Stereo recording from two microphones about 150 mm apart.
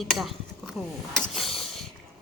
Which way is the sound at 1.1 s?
Centre (ahead or behind).